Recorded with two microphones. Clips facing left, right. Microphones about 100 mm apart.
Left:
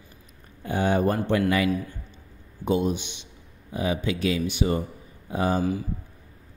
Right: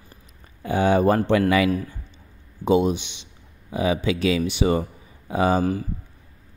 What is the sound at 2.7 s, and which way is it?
Speech, 90° right.